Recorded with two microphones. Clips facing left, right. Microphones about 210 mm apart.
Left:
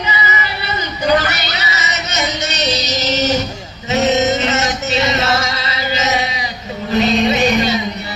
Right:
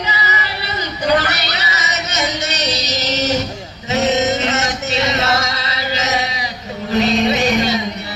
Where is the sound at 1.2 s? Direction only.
65° right (ahead or behind).